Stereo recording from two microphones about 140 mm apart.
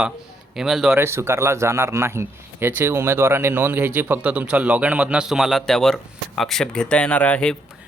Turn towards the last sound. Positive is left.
turn(degrees=10)  # may be behind; listen again after turning